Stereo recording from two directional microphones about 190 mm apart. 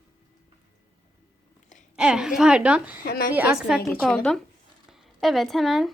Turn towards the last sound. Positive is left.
turn(degrees=0)  # may be behind; listen again after turning